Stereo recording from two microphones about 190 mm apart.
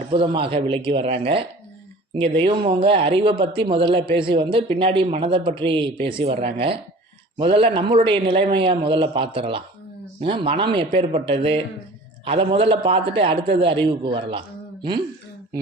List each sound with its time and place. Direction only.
0.1 s speech: 25° right (ahead or behind)